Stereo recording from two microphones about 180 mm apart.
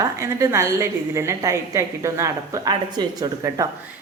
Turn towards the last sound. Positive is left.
turn(degrees=-20)  # may be behind; listen again after turning